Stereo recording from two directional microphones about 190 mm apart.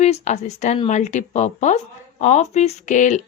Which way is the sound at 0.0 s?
35° left (ahead or behind).